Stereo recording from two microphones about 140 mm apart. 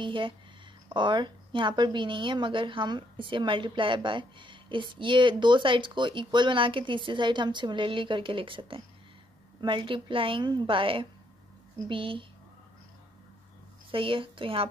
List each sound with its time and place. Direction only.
0.0 s a woman's voice: 35° right (ahead or behind)
13.9 s a woman's voice: 40° right (ahead or behind)